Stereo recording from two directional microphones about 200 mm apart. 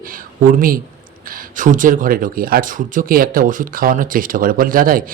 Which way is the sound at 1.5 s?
40° right (ahead or behind).